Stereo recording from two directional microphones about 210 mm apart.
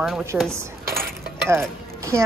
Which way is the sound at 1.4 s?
15° right (ahead or behind).